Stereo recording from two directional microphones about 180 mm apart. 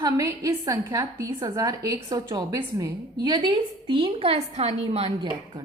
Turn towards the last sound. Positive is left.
turn(degrees=-35)  # may be behind; listen again after turning